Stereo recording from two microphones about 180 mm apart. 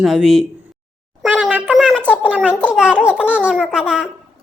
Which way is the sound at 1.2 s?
5° right (ahead or behind).